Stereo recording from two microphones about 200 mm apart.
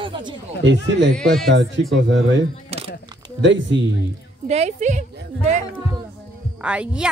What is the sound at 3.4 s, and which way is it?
Speech, 65° right (ahead or behind).